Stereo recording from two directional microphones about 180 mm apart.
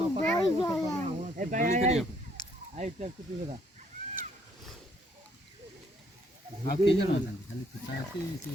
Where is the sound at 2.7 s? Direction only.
40° right (ahead or behind).